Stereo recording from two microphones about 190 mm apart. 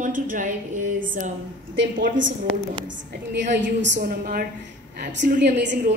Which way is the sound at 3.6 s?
70° right (ahead or behind).